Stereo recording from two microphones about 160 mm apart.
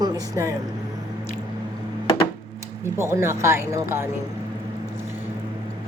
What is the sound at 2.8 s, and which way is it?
Speech, 15° right (ahead or behind).